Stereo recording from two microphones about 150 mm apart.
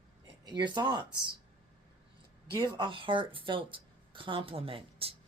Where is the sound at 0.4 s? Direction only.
30° right (ahead or behind).